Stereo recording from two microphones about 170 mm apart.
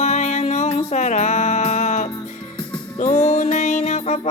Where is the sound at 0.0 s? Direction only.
40° left (ahead or behind).